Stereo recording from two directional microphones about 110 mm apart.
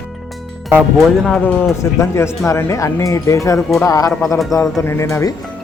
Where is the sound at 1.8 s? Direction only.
25° left (ahead or behind).